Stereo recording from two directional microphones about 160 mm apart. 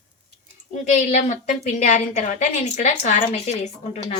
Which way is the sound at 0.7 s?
50° left (ahead or behind).